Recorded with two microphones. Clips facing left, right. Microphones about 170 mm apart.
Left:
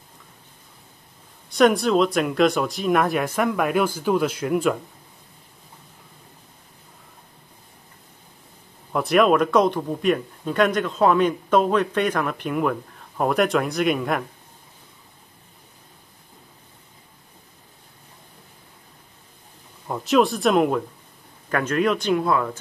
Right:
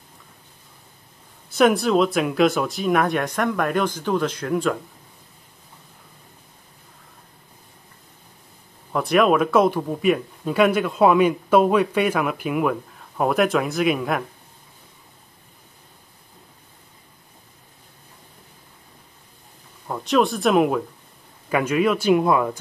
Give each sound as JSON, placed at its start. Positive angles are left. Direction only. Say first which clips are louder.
{"t": 1.5, "sound": "speech", "louder": "even", "side_deg": 0}
{"t": 8.9, "sound": "speech", "louder": "even", "side_deg": 0}
{"t": 19.9, "sound": "speech", "louder": "left 1 dB", "side_deg": 0}
{"t": 22.1, "sound": "speech", "louder": "right 3 dB", "side_deg": -15}